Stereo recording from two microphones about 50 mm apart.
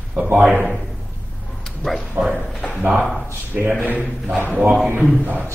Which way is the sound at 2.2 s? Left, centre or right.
Right.